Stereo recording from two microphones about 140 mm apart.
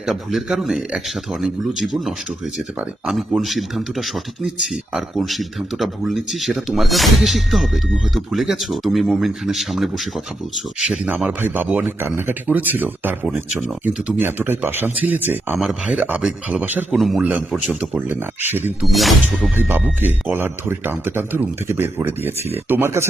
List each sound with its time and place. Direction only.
0.0 s speech: 5° right (ahead or behind)
18.9 s speech: centre (ahead or behind)
19.5 s speech: 15° right (ahead or behind)